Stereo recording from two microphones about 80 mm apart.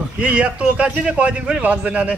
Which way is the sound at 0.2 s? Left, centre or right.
Centre.